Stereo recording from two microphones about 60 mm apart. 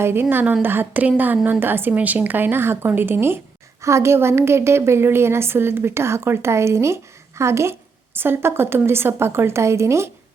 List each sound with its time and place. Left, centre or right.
0.0 s a woman's voice: right
1.9 s a woman's voice: right
3.8 s a woman's voice: right